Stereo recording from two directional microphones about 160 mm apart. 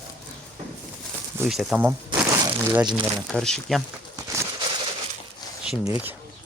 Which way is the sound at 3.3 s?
5° left (ahead or behind).